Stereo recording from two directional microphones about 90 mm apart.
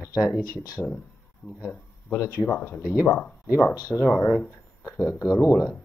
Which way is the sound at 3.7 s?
45° left (ahead or behind).